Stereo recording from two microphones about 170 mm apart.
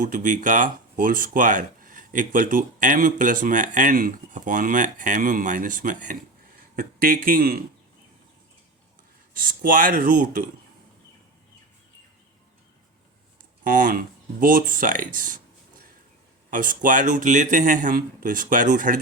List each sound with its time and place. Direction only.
0.0 s speech: 50° right (ahead or behind)
9.3 s speech: 55° right (ahead or behind)
13.7 s speech: 55° right (ahead or behind)
16.5 s speech: 50° right (ahead or behind)